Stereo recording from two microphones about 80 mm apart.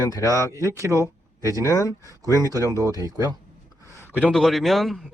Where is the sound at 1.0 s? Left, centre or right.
Right.